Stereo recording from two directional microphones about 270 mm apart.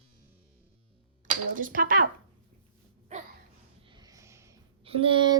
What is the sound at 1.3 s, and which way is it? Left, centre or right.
Speech, right.